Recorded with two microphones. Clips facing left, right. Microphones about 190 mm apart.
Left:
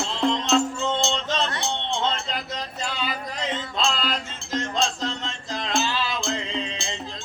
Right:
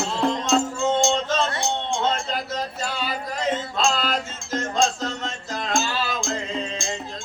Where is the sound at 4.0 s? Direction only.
45° right (ahead or behind).